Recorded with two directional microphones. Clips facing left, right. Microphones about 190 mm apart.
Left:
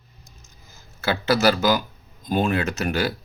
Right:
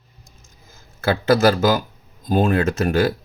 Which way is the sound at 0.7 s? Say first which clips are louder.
Right 4 dB; 50° right (ahead or behind).